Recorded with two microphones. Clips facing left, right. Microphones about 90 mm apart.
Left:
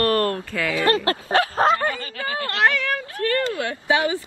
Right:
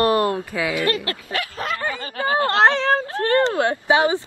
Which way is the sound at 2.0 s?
30° right (ahead or behind).